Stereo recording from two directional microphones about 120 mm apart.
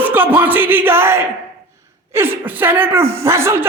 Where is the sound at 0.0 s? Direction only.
15° right (ahead or behind).